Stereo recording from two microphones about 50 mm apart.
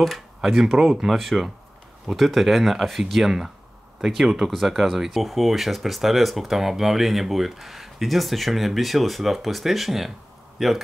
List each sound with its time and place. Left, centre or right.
0.0 s speech: centre